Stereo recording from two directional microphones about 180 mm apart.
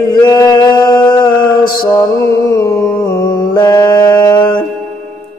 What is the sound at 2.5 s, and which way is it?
Music, 15° left (ahead or behind).